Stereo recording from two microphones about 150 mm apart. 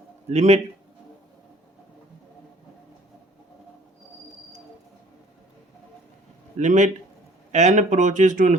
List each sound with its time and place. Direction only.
0.3 s a man's voice: 45° right (ahead or behind)
6.6 s a man's voice: 55° right (ahead or behind)